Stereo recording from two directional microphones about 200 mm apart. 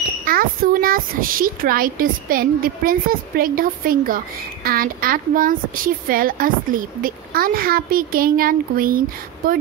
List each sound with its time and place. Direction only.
0.2 s a woman's voice: 45° right (ahead or behind)